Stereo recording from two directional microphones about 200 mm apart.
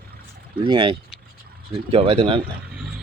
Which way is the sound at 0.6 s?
25° right (ahead or behind).